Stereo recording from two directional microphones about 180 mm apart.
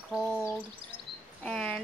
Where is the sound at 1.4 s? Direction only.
5° left (ahead or behind).